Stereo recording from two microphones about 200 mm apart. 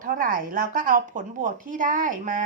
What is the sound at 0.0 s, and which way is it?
Speech, 45° right (ahead or behind).